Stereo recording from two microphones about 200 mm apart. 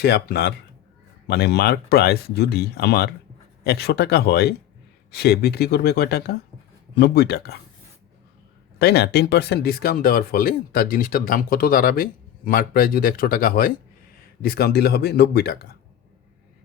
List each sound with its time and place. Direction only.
0.0 s speech: 55° left (ahead or behind)
8.8 s speech: 55° left (ahead or behind)